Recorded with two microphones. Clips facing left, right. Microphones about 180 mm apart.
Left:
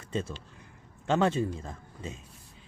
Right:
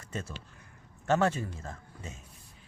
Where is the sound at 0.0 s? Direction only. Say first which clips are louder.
Left 6 dB; 25° left (ahead or behind).